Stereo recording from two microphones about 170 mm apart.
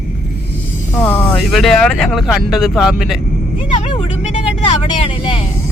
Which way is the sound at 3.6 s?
30° left (ahead or behind).